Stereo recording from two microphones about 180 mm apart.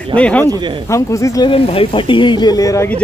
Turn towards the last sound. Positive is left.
turn(degrees=10)  # may be behind; listen again after turning